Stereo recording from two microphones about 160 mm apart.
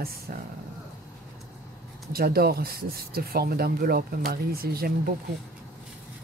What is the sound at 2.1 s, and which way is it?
Speech, 70° right (ahead or behind).